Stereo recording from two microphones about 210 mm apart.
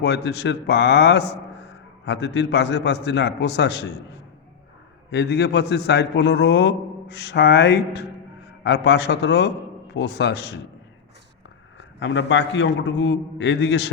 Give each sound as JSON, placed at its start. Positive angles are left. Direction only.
{"t": 0.0, "sound": "a man's voice", "side_deg": 55}
{"t": 5.1, "sound": "a man's voice", "side_deg": 55}
{"t": 11.8, "sound": "a man's voice", "side_deg": 60}